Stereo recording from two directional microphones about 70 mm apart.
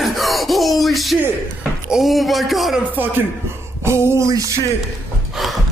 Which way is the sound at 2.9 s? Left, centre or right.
Right.